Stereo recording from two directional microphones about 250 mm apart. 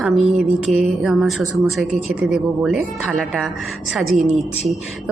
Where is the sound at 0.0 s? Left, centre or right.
Centre.